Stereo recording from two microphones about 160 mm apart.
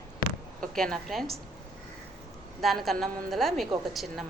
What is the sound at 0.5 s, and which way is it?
Speech, 5° left (ahead or behind).